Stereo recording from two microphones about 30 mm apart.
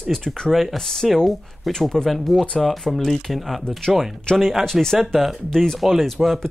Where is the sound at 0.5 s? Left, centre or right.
Centre.